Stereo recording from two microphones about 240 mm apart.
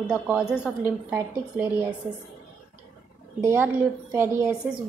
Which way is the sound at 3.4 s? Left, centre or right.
Centre.